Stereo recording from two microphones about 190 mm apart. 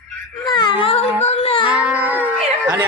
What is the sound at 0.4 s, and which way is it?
Baby cry, 25° left (ahead or behind).